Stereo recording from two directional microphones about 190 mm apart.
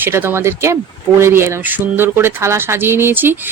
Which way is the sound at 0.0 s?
10° right (ahead or behind).